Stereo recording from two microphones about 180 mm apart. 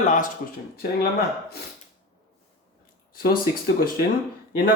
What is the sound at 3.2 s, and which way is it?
Speech, 55° left (ahead or behind).